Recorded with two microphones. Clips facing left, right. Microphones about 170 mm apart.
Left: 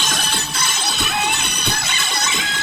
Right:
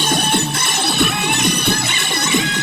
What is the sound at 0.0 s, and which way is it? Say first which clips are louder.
Music: right 8 dB; 60° right (ahead or behind).